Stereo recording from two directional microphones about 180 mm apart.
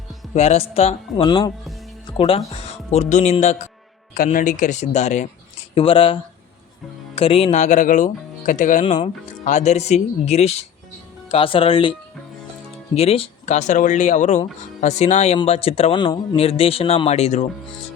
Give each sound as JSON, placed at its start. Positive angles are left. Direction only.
{"t": 0.3, "sound": "speech", "side_deg": 35}
{"t": 4.1, "sound": "speech", "side_deg": 50}
{"t": 5.7, "sound": "speech", "side_deg": 30}
{"t": 7.2, "sound": "speech", "side_deg": 30}
{"t": 8.8, "sound": "speech", "side_deg": 30}
{"t": 9.4, "sound": "speech", "side_deg": 40}